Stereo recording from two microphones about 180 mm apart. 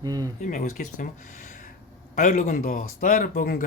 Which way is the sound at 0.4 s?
45° left (ahead or behind).